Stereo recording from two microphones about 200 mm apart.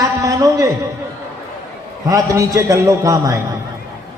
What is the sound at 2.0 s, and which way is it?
A man's voice, 15° right (ahead or behind).